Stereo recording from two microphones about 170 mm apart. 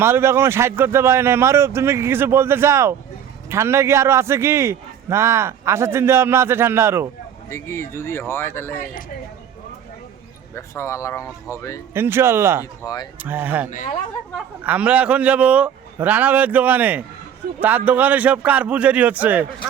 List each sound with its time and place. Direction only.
0.0 s a man's voice: 15° right (ahead or behind)
7.5 s speech: 15° left (ahead or behind)
10.5 s speech: 15° left (ahead or behind)
11.9 s a man's voice: 15° right (ahead or behind)
12.8 s speech: 25° left (ahead or behind)
13.1 s a man's voice: 10° right (ahead or behind)